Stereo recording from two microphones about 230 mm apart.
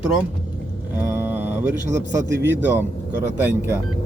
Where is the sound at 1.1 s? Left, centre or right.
Centre.